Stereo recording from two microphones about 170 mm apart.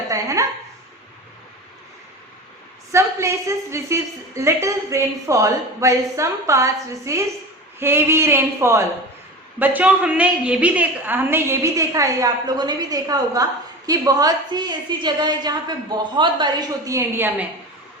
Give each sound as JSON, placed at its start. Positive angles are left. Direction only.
{"t": 0.1, "sound": "a woman's voice", "side_deg": -20}
{"t": 2.9, "sound": "a woman's voice", "side_deg": -15}